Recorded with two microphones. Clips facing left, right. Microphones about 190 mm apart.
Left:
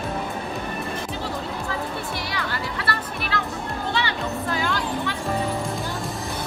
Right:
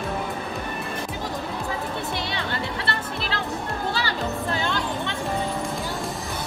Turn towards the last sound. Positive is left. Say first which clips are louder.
# left 1 dB
turn(degrees=-25)  # may be behind; listen again after turning